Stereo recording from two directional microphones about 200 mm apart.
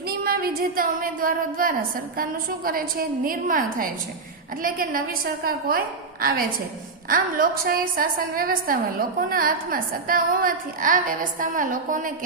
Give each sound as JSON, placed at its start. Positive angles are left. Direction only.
{"t": 0.1, "sound": "a woman's voice", "side_deg": -50}